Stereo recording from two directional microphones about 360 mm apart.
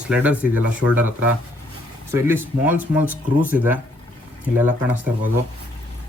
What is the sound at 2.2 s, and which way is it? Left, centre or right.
Speech, centre.